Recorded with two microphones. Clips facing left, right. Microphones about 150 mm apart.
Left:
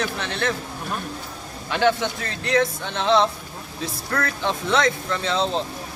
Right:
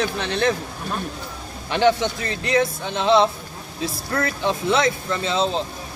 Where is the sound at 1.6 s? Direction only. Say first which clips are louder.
Right 2 dB; 25° right (ahead or behind).